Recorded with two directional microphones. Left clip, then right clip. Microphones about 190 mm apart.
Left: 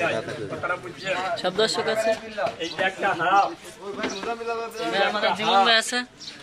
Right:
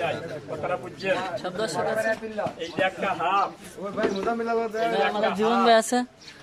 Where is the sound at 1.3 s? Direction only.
Centre (ahead or behind).